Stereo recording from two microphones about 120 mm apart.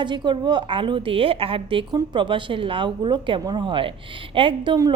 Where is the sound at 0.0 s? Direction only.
40° right (ahead or behind).